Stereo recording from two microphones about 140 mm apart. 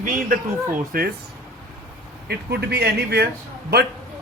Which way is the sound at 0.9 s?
90° right.